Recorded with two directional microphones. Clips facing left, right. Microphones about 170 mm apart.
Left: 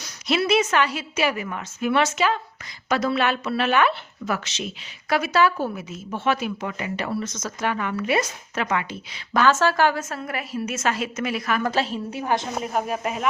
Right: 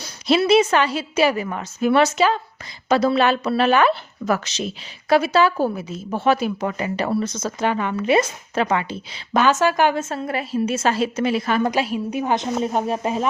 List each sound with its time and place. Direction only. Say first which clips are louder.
0.0 s speech: right 5 dB; 30° right (ahead or behind)
9.4 s a woman's voice: right 1 dB; 15° right (ahead or behind)
11.7 s a woman's voice: right 3 dB; 15° right (ahead or behind); by 13.2 s 30° right (ahead or behind)